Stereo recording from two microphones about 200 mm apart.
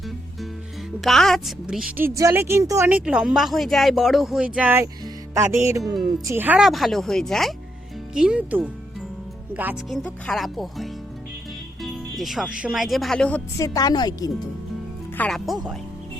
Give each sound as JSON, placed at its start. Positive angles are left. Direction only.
{"t": 1.0, "sound": "a woman's voice", "side_deg": 0}
{"t": 9.9, "sound": "a woman's voice", "side_deg": 0}
{"t": 13.6, "sound": "a woman's voice", "side_deg": 20}
{"t": 15.2, "sound": "a woman's voice", "side_deg": 0}